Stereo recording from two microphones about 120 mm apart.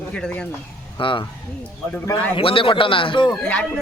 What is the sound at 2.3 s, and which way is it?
A man's voice, 50° left (ahead or behind).